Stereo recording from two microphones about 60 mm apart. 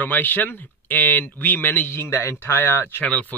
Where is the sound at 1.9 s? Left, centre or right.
Left.